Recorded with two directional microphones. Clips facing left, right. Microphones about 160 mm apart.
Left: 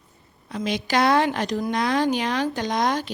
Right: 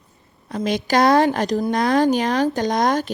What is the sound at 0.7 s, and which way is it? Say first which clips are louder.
Speech: right 4 dB; 45° right (ahead or behind).